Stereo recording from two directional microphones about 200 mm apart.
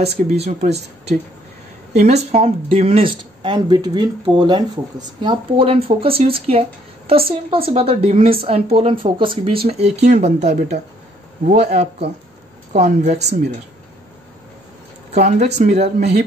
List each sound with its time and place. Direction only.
0.0 s speech: 30° right (ahead or behind)
2.3 s a woman's voice: 30° right (ahead or behind)
15.1 s speech: 40° right (ahead or behind)